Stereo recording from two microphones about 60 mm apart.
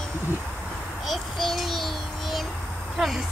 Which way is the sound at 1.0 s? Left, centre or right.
Centre.